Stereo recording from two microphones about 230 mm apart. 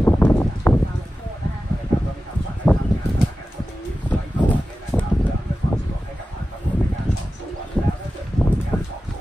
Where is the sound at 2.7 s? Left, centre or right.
Centre.